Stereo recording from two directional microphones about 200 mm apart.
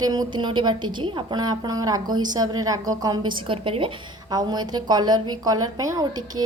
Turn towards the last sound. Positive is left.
turn(degrees=-20)  # may be behind; listen again after turning